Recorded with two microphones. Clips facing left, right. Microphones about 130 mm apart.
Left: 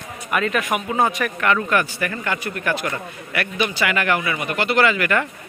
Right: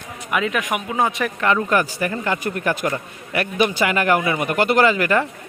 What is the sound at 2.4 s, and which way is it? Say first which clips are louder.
A man's voice: right 2 dB; 40° right (ahead or behind).